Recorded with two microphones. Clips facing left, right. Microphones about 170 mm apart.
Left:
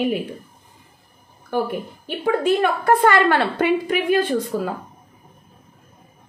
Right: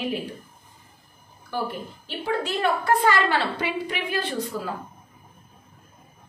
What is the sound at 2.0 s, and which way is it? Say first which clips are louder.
A woman's voice: left 8 dB; 50° left (ahead or behind).